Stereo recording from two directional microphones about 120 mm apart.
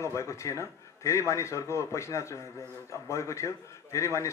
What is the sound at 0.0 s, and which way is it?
A man's voice, 25° left (ahead or behind).